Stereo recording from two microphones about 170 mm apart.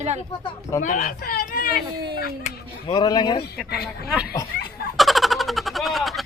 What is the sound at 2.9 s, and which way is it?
Speech, 25° left (ahead or behind).